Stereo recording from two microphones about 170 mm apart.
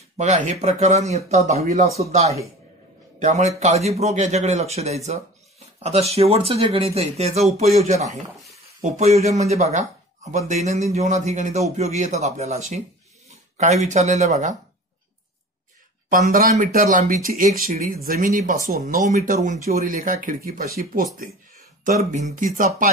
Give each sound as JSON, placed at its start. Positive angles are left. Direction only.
{"t": 0.2, "sound": "speech", "side_deg": -40}
{"t": 16.1, "sound": "speech", "side_deg": -55}
{"t": 21.8, "sound": "speech", "side_deg": -45}